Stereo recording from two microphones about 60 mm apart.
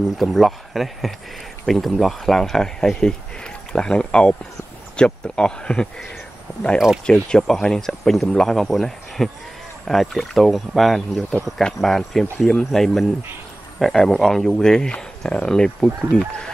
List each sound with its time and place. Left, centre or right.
0.2 s speech: centre
7.1 s speech: centre